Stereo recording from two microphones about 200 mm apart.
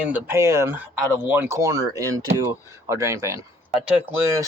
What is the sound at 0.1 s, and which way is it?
Speech, 15° right (ahead or behind).